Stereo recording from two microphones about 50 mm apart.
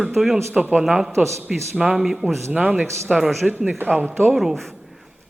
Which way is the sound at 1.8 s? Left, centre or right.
Centre.